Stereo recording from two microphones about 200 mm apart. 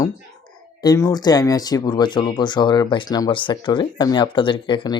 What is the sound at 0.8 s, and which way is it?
Speech, 15° left (ahead or behind).